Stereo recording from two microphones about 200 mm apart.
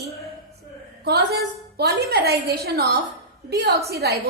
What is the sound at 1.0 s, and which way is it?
A woman's voice, 55° right (ahead or behind).